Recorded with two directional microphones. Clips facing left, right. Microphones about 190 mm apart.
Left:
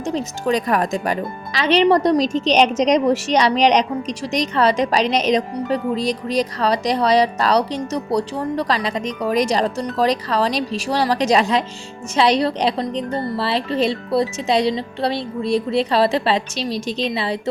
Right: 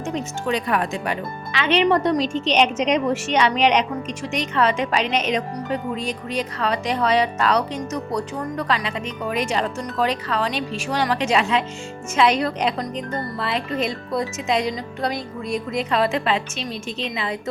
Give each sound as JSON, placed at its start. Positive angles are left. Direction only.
{"t": 0.0, "sound": "speech", "side_deg": 35}